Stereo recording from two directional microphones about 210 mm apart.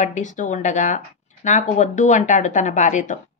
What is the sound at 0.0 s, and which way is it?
Speech, 35° left (ahead or behind).